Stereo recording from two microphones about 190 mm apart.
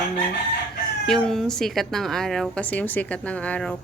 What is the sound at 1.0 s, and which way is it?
A woman's voice, centre (ahead or behind).